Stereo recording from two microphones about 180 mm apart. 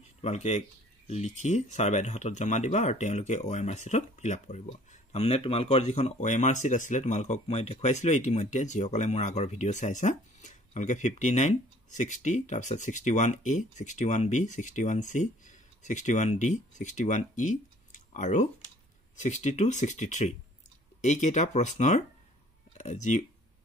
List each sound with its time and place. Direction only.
0.2 s speech: 40° left (ahead or behind)